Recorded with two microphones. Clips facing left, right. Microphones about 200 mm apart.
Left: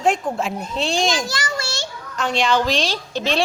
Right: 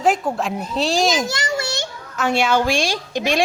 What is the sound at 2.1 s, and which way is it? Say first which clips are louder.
A woman's voice: right 1 dB; 5° right (ahead or behind).